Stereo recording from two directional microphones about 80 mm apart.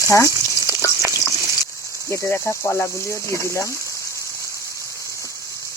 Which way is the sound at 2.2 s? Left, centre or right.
Left.